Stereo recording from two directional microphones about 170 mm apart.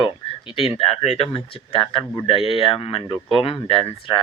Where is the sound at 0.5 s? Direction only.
35° left (ahead or behind).